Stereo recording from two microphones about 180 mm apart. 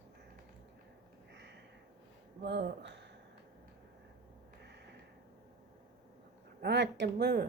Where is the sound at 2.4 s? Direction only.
65° right (ahead or behind).